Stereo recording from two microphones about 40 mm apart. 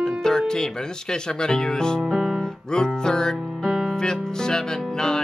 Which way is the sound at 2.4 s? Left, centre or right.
Centre.